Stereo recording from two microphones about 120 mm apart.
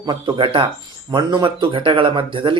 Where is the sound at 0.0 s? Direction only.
40° right (ahead or behind).